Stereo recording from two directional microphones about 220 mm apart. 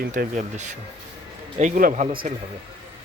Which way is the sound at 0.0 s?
40° right (ahead or behind).